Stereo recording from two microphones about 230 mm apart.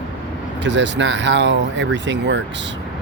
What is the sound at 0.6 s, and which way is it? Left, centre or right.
Speech, right.